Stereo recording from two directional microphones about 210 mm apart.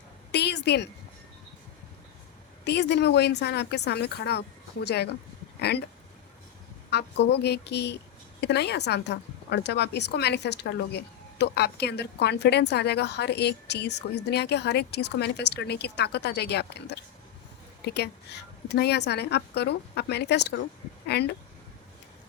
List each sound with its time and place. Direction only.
0.3 s a sound: 55° left (ahead or behind)
2.6 s a woman's voice: 55° left (ahead or behind)
6.9 s a woman's voice: 55° left (ahead or behind)